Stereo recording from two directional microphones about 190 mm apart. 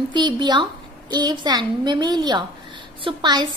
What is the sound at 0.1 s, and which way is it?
A woman's voice, 25° right (ahead or behind).